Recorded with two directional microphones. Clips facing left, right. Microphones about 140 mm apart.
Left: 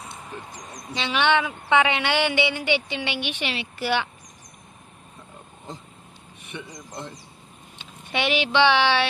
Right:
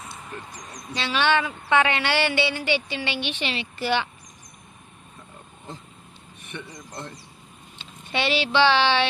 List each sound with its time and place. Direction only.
0.0 s a sound: 15° left (ahead or behind)
0.9 s a woman's voice: 15° left (ahead or behind)
6.5 s a woman's voice: 15° left (ahead or behind)